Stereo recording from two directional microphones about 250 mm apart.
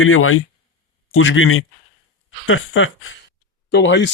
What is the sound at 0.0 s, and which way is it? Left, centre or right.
Speech, left.